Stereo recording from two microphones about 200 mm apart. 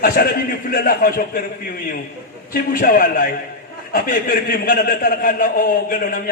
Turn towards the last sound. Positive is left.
turn(degrees=45)  # may be behind; listen again after turning